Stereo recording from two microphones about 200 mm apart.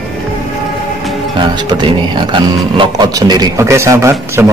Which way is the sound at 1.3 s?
25° right (ahead or behind).